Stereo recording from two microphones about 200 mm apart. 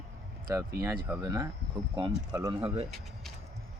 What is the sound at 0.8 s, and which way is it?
Speech, 50° right (ahead or behind).